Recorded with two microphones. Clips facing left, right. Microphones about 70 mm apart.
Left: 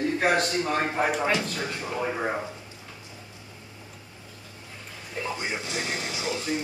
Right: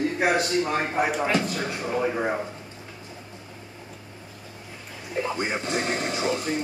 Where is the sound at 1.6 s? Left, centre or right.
Right.